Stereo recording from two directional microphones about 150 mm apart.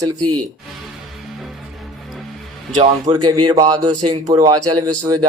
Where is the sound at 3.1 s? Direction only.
30° right (ahead or behind).